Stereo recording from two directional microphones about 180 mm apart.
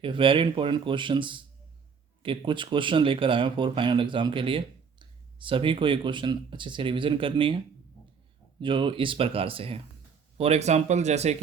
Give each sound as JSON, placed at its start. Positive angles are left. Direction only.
{"t": 0.0, "sound": "speech", "side_deg": -30}
{"t": 8.6, "sound": "speech", "side_deg": -30}